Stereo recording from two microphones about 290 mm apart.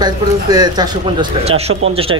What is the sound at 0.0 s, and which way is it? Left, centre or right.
Speech, centre.